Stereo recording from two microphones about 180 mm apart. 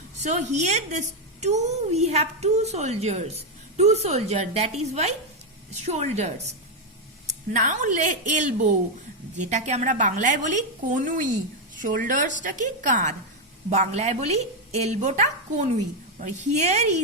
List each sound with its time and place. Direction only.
0.2 s a woman's voice: 40° right (ahead or behind)
7.5 s a woman's voice: 45° right (ahead or behind)